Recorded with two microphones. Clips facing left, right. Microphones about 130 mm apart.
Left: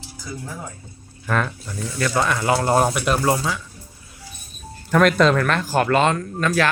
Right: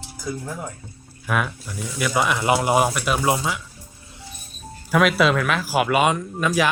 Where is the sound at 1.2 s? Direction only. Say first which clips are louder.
Left 1 dB; 5° right (ahead or behind).